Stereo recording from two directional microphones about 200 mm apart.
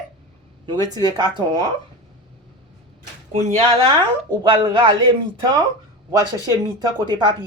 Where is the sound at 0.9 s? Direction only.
20° right (ahead or behind).